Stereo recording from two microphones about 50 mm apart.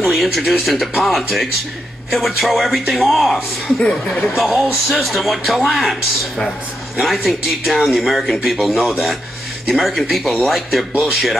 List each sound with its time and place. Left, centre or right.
0.0 s speech: centre
3.8 s speech: centre
4.4 s speech: centre
7.0 s speech: centre